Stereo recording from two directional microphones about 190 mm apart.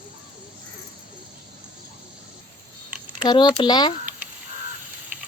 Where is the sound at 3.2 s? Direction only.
25° left (ahead or behind).